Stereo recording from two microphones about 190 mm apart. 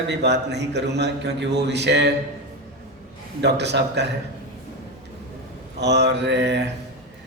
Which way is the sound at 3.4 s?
65° right (ahead or behind).